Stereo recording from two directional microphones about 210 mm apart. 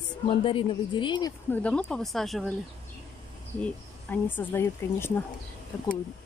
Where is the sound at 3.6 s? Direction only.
10° left (ahead or behind).